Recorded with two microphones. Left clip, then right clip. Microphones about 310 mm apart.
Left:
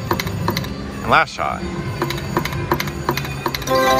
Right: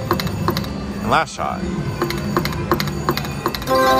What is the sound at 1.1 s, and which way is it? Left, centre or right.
Speech, centre.